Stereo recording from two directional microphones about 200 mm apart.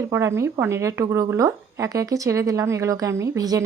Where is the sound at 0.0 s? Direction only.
15° right (ahead or behind).